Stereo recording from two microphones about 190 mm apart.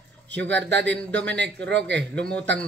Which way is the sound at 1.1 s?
65° right (ahead or behind).